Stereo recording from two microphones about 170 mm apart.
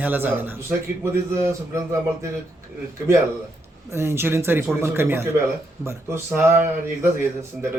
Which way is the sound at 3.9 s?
15° right (ahead or behind).